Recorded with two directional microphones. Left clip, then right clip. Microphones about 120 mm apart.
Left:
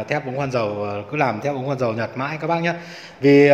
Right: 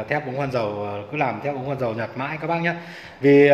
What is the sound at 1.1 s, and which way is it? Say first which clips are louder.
Speech: left 3 dB; 50° left (ahead or behind).